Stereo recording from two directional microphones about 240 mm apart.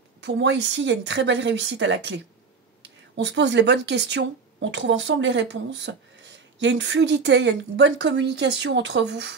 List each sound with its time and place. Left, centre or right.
0.2 s a woman's voice: right